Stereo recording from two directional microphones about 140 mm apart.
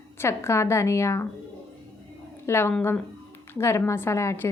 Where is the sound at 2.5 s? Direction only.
15° left (ahead or behind).